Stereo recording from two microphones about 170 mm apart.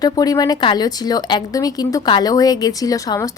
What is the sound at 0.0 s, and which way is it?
Speech, 20° left (ahead or behind).